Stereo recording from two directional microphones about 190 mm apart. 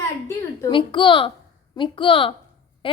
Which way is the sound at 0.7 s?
25° left (ahead or behind).